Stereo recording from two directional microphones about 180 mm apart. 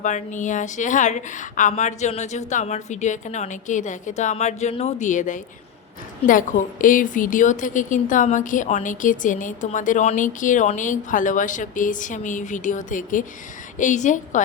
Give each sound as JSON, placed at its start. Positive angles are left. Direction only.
{"t": 0.0, "sound": "a woman's voice", "side_deg": 45}